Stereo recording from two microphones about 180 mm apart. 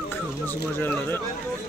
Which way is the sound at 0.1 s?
10° left (ahead or behind).